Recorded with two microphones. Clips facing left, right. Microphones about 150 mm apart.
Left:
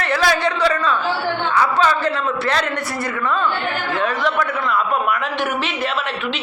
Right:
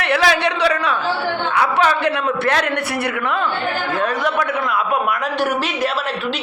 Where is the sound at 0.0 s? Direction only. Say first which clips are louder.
Right 1 dB; 70° right (ahead or behind).